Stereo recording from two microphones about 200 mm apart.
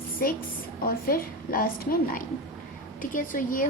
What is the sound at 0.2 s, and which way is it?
A woman's voice, 45° left (ahead or behind).